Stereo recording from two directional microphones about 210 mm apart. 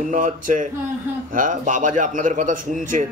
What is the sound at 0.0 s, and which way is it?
Speech, 40° right (ahead or behind).